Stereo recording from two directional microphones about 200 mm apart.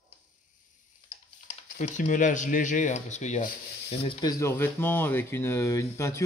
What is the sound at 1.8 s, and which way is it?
Speech, 40° left (ahead or behind).